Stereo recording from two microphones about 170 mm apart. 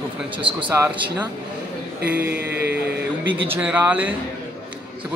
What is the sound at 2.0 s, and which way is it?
Speech, 10° right (ahead or behind).